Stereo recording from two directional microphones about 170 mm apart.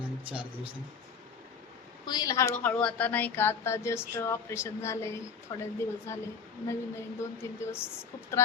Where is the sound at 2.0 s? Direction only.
20° left (ahead or behind).